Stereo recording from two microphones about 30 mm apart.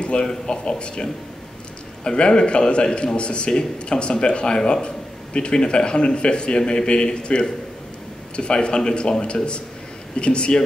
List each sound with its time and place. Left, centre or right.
0.0 s a sound: left
0.5 s a man's voice: left
2.0 s a man's voice: left